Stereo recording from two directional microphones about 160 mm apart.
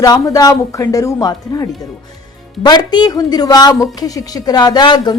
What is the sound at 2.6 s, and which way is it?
A woman's voice, 25° left (ahead or behind).